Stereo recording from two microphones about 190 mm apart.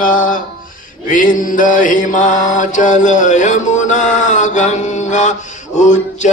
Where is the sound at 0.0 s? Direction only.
45° left (ahead or behind).